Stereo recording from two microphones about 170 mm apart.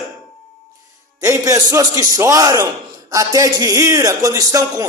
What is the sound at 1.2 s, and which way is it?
A man's voice, 20° right (ahead or behind).